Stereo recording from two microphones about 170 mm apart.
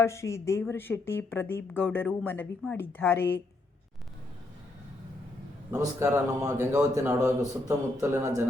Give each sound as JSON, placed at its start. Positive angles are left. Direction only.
{"t": 0.0, "sound": "speech", "side_deg": 15}
{"t": 5.7, "sound": "a man's voice", "side_deg": -15}